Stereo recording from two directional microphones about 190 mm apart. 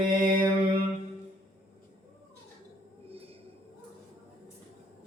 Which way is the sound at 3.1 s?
30° right (ahead or behind).